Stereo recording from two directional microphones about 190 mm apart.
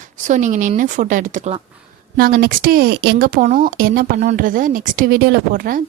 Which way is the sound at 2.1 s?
55° right (ahead or behind).